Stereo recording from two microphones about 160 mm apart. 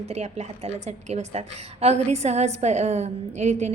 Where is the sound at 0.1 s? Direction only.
45° right (ahead or behind).